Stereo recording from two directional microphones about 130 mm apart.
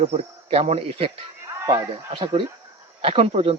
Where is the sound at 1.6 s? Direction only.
35° right (ahead or behind).